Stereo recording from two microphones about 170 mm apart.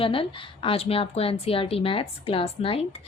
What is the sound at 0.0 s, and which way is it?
A woman's voice, 30° left (ahead or behind).